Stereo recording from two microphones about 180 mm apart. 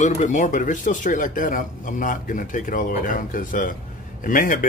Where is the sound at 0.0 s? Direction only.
45° left (ahead or behind).